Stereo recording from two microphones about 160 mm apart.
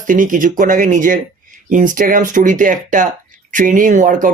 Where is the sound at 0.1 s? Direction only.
55° right (ahead or behind).